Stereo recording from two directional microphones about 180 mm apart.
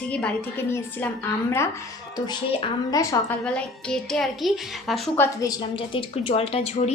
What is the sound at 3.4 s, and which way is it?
A woman's voice, 5° left (ahead or behind).